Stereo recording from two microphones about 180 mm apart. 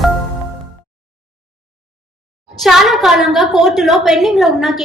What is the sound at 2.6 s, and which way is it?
A woman's voice, centre (ahead or behind).